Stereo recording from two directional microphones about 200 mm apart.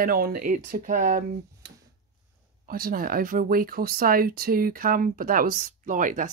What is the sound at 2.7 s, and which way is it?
Speech, 45° right (ahead or behind).